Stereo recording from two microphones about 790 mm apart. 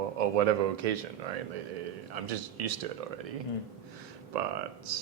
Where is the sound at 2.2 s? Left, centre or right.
Right.